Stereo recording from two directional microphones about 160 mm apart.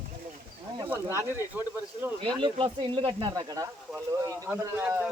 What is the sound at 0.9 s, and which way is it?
Speech, 15° right (ahead or behind).